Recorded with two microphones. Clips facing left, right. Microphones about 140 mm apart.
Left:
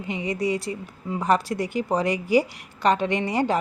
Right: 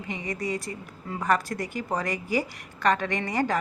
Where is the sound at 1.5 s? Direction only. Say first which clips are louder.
Left 5 dB; 15° left (ahead or behind).